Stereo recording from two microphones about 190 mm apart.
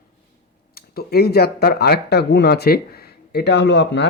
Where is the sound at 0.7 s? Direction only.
55° left (ahead or behind).